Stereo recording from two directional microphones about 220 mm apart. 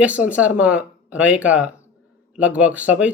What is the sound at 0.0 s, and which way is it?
Speech, 5° right (ahead or behind).